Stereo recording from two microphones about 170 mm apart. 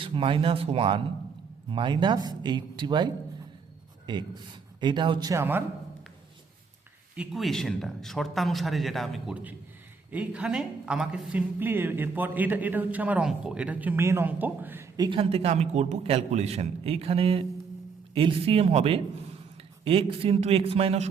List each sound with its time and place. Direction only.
0.0 s a man's voice: 30° right (ahead or behind)
4.8 s speech: 25° right (ahead or behind)
7.2 s a man's voice: centre (ahead or behind); by 21.1 s 35° right (ahead or behind)